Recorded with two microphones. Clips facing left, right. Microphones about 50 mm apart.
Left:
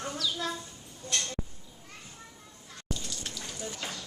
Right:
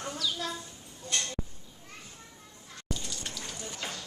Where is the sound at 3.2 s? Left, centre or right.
Centre.